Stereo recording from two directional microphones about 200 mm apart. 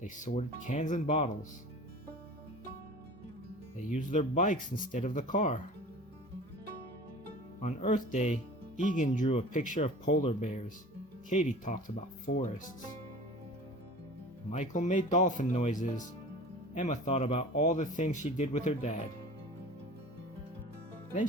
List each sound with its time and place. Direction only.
0.0 s speech: 40° left (ahead or behind)
3.8 s speech: 40° left (ahead or behind)
7.6 s speech: 35° left (ahead or behind)
14.5 s speech: 35° left (ahead or behind)